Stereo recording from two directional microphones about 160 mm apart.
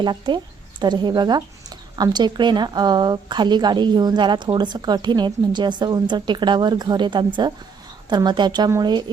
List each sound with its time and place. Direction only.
0.0 s speech: 30° right (ahead or behind)